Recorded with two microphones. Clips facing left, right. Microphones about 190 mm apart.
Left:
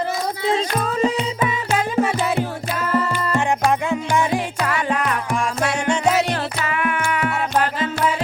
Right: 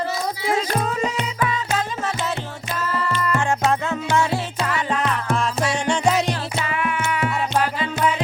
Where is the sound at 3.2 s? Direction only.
25° left (ahead or behind).